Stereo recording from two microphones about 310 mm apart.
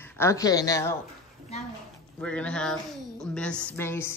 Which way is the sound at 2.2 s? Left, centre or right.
Centre.